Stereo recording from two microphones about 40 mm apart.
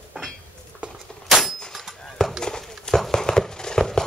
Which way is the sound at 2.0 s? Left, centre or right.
Centre.